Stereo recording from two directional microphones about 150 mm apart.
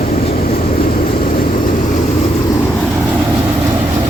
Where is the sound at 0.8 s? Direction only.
75° left (ahead or behind).